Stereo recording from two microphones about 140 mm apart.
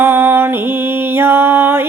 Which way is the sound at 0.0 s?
15° right (ahead or behind).